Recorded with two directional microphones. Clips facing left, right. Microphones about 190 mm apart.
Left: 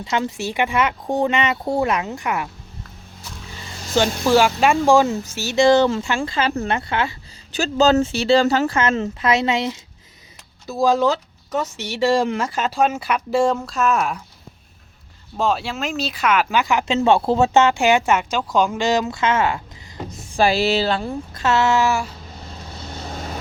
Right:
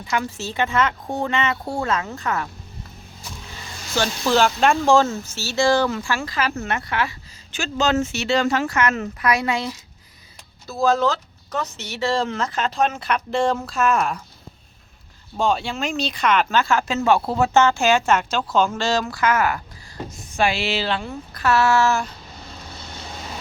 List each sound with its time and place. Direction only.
0.0 s speech: 25° left (ahead or behind)
4.2 s speech: 10° left (ahead or behind)
7.5 s speech: 35° left (ahead or behind); by 14.2 s centre (ahead or behind)
15.4 s speech: centre (ahead or behind); by 19.6 s 25° left (ahead or behind)
20.3 s speech: 35° left (ahead or behind)
21.3 s speech: 20° left (ahead or behind)